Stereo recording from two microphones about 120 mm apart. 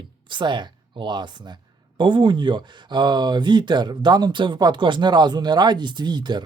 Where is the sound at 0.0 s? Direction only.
40° right (ahead or behind).